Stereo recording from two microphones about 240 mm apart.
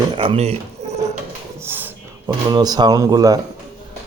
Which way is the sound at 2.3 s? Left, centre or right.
Centre.